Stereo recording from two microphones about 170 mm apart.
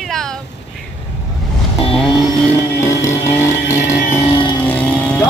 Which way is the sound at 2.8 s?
15° left (ahead or behind).